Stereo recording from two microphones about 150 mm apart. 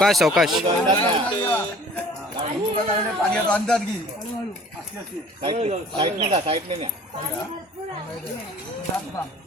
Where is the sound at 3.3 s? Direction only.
5° left (ahead or behind).